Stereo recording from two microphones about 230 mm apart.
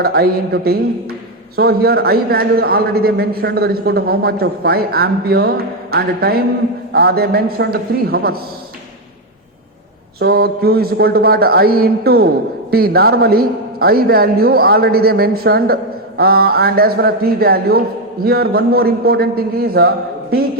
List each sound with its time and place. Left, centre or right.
0.0 s a man's voice: right
10.2 s a man's voice: right